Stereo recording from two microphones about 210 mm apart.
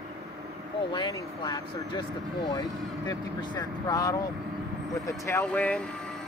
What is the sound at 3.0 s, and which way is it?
Speech, 20° left (ahead or behind).